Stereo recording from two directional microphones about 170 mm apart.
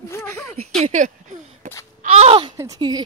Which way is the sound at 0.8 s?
45° right (ahead or behind).